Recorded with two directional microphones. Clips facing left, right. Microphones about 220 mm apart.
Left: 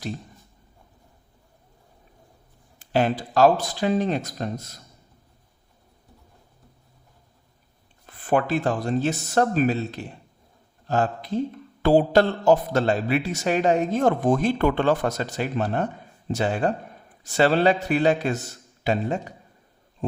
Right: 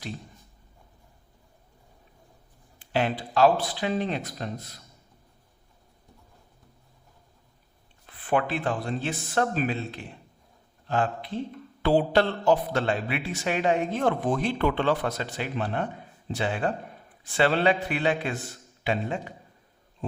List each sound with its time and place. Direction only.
2.7 s speech: 45° left (ahead or behind)
8.0 s speech: 45° left (ahead or behind)
20.0 s a sound: 45° left (ahead or behind)